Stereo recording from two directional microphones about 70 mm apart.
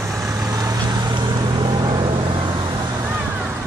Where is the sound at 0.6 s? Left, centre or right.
Right.